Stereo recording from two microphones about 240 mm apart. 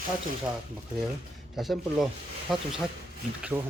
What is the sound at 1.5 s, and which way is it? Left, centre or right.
Speech, centre.